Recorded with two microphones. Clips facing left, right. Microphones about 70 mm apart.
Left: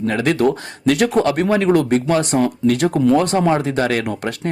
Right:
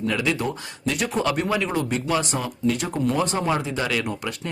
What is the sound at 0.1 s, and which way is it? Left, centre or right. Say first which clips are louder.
Speech: left 6 dB; left.